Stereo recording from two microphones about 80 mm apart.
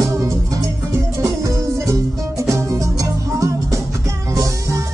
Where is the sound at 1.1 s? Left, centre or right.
Right.